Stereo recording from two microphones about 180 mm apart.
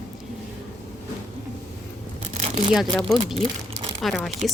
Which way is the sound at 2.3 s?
40° right (ahead or behind).